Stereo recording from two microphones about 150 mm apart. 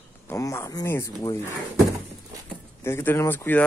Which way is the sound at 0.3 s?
20° left (ahead or behind).